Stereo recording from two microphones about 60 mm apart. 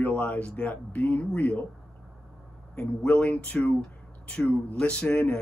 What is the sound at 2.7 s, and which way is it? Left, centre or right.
Speech, left.